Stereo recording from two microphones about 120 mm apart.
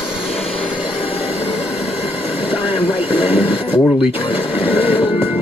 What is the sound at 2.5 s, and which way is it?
Vehicle, 45° left (ahead or behind).